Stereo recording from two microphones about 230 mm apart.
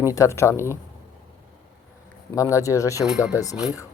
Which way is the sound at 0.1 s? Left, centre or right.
Centre.